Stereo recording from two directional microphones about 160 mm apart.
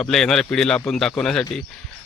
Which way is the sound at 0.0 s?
5° left (ahead or behind).